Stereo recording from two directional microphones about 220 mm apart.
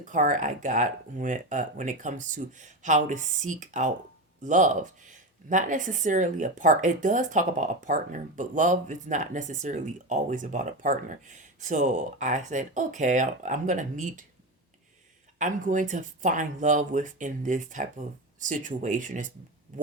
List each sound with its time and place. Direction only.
0.0 s a woman's voice: 35° right (ahead or behind)
15.4 s a woman's voice: 35° right (ahead or behind)